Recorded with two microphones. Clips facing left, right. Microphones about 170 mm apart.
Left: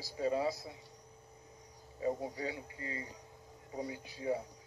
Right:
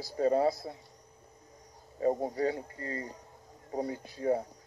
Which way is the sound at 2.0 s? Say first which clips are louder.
Right 7 dB; 50° right (ahead or behind).